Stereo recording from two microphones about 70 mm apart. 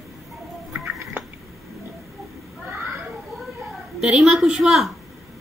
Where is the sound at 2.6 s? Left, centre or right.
Right.